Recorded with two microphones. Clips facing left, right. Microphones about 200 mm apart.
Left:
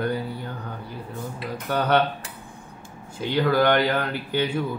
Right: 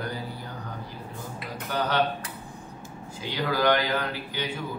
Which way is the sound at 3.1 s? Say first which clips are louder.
Left 7 dB; 55° left (ahead or behind).